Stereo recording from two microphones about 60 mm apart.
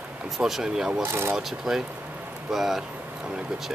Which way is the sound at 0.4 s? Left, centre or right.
Centre.